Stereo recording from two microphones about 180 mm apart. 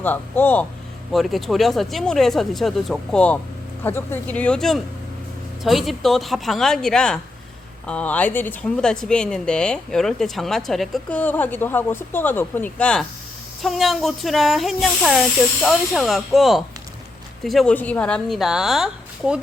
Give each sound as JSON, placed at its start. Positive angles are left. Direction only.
{"t": 0.0, "sound": "speech", "side_deg": 10}